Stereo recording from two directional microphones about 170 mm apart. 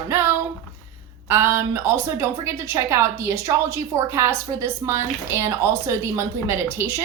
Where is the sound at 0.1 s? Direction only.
15° right (ahead or behind).